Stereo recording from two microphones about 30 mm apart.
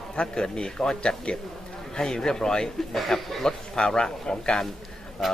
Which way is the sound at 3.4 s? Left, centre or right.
Left.